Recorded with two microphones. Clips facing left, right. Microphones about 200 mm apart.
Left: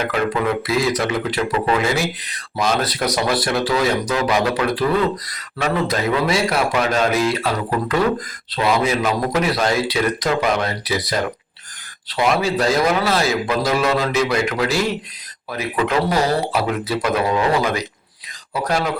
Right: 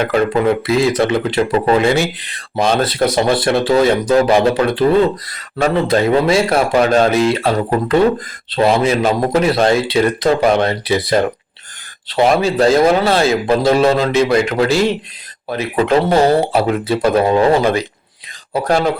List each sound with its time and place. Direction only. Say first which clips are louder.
0.0 s speech: right 6 dB; 35° right (ahead or behind)